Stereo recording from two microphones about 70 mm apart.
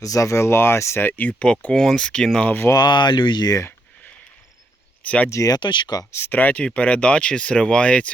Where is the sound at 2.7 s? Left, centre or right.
Left.